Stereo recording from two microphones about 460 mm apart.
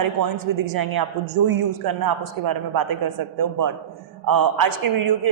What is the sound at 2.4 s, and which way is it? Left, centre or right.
Speech, right.